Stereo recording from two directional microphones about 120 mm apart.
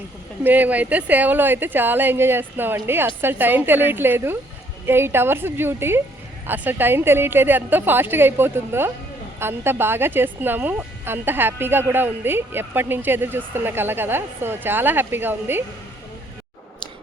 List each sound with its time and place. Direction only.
0.4 s a woman's voice: 15° right (ahead or behind)